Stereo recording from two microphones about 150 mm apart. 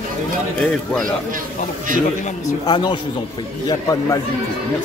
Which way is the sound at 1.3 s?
65° right (ahead or behind).